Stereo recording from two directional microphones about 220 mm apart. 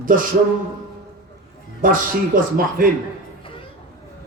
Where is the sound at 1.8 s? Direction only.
40° right (ahead or behind).